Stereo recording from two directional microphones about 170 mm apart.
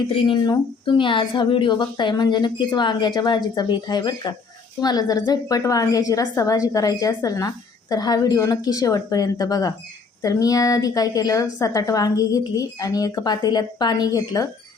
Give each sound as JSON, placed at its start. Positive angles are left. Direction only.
{"t": 0.3, "sound": "a woman's voice", "side_deg": 25}